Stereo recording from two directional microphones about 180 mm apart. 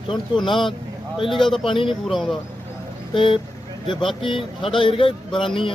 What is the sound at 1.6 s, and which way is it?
Speech, 30° left (ahead or behind).